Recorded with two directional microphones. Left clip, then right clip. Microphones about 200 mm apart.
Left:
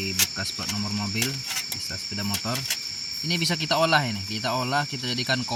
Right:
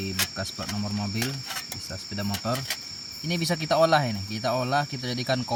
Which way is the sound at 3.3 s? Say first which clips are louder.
Left 1 dB; 35° right (ahead or behind).